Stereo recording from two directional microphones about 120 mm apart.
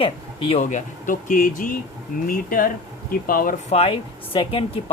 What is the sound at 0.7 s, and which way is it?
Speech, 90° left.